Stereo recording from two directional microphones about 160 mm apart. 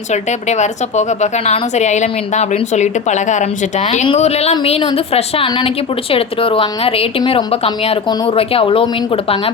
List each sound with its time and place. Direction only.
0.1 s a woman's voice: 45° left (ahead or behind)